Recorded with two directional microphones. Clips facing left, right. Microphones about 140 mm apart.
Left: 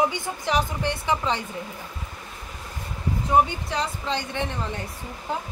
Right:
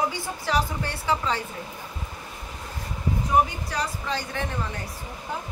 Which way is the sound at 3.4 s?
25° left (ahead or behind).